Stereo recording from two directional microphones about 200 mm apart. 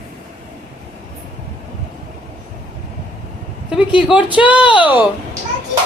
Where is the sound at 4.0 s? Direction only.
5° right (ahead or behind).